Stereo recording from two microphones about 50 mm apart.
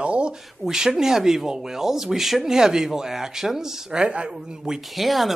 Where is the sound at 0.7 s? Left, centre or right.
Centre.